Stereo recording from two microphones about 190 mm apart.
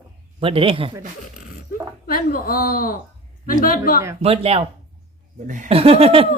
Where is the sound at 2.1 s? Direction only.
50° left (ahead or behind).